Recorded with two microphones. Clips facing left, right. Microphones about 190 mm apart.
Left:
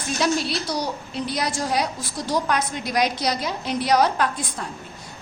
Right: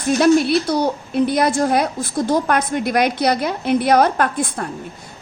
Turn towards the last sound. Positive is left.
turn(degrees=-55)  # may be behind; listen again after turning